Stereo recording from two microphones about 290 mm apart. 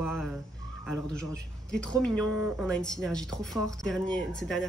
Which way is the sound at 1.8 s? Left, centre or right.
Centre.